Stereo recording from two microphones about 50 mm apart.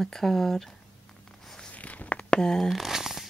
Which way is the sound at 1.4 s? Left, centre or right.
Centre.